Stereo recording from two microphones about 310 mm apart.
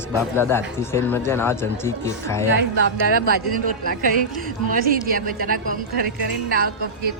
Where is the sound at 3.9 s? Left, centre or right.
Right.